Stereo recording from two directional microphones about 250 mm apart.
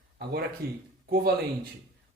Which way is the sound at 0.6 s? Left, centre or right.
Right.